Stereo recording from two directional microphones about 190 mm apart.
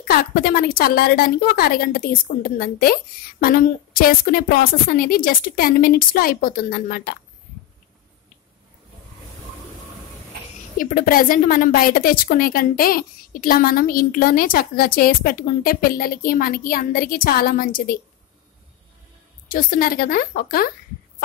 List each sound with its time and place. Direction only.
0.1 s a woman's voice: 50° left (ahead or behind)
10.8 s a woman's voice: 45° left (ahead or behind)
19.5 s a woman's voice: 50° left (ahead or behind)